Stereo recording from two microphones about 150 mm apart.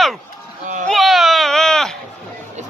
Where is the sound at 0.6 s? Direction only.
55° right (ahead or behind).